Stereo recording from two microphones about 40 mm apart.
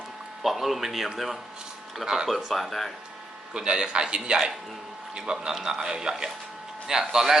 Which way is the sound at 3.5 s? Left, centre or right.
Right.